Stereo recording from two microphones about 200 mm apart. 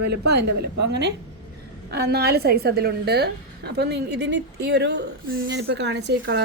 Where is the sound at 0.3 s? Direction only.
55° right (ahead or behind).